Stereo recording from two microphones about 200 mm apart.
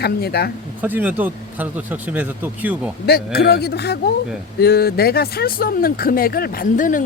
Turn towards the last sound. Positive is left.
turn(degrees=40)  # may be behind; listen again after turning